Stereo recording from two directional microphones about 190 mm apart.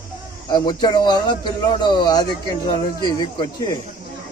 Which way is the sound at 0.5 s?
20° left (ahead or behind).